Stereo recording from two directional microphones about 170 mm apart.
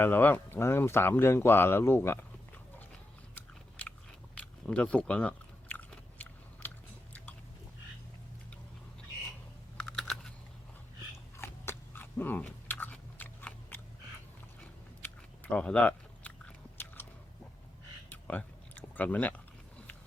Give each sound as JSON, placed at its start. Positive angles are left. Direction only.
{"t": 0.0, "sound": "speech", "side_deg": 10}
{"t": 3.3, "sound": "biting", "side_deg": 10}
{"t": 9.8, "sound": "typing", "side_deg": 5}
{"t": 11.3, "sound": "biting", "side_deg": 15}
{"t": 15.0, "sound": "biting", "side_deg": 10}
{"t": 18.1, "sound": "a sound", "side_deg": 10}